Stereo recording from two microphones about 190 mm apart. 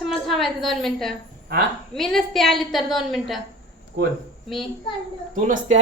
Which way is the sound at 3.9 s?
55° right (ahead or behind).